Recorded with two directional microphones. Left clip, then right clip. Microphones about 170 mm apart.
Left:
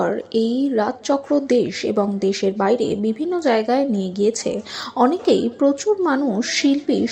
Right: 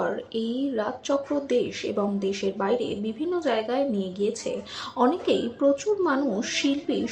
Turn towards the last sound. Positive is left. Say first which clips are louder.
# left 7 dB
turn(degrees=30)  # may be behind; listen again after turning